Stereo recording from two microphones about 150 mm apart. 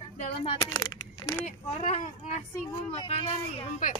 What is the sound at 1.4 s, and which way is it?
Speech, 50° left (ahead or behind).